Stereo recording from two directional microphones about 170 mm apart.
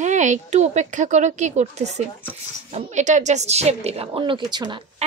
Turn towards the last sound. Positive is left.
turn(degrees=-25)  # may be behind; listen again after turning